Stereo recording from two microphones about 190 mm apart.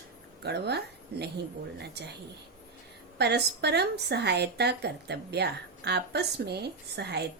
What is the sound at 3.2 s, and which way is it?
A woman's voice, 60° right (ahead or behind).